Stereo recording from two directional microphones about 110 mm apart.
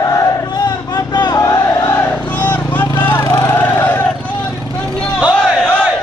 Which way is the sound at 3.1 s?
30° left (ahead or behind).